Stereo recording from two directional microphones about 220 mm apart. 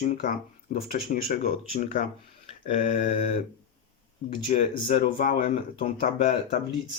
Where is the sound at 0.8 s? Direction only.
35° left (ahead or behind).